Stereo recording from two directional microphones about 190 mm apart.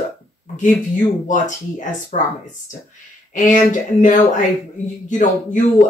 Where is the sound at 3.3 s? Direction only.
45° left (ahead or behind).